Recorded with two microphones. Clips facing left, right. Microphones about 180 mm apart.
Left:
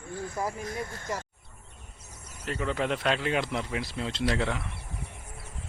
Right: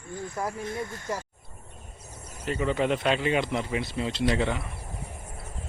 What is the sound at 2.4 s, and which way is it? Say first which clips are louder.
Speech: right 4 dB; centre (ahead or behind).